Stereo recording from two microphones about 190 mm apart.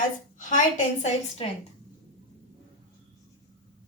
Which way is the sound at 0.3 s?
45° left (ahead or behind).